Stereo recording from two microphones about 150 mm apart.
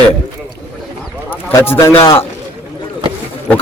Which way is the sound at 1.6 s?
20° left (ahead or behind).